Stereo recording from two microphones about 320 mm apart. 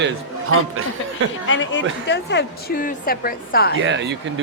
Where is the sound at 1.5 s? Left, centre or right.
Left.